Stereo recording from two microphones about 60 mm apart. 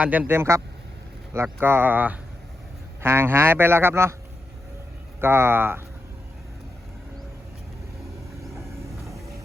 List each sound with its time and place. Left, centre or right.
0.0 s speech: right
0.3 s speech: right
1.5 s speech: right
3.0 s speech: right
5.2 s speech: right